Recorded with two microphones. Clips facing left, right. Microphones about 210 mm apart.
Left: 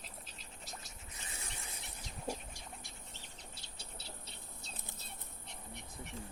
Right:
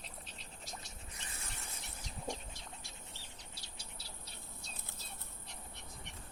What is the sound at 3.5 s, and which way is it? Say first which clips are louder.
Bird: left 1 dB; 25° left (ahead or behind).